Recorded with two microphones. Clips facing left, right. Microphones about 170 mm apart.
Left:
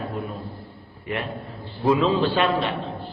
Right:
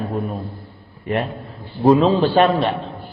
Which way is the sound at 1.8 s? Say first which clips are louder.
Right 6 dB; 40° right (ahead or behind).